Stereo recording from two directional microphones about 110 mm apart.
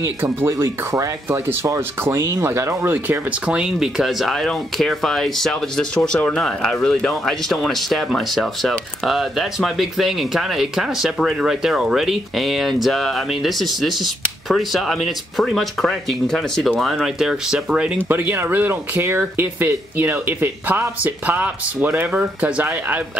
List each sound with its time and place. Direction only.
0.0 s speech: 25° right (ahead or behind)
3.4 s speech: 10° right (ahead or behind)